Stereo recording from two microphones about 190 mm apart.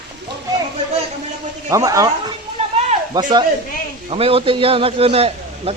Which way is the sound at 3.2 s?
20° right (ahead or behind).